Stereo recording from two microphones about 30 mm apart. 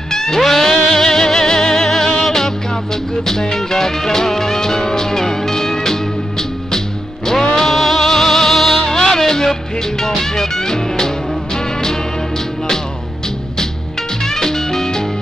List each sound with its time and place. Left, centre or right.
0.1 s music: centre
3.3 s music: centre
14.2 s music: centre